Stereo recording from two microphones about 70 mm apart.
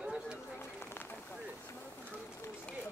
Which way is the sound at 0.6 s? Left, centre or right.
Left.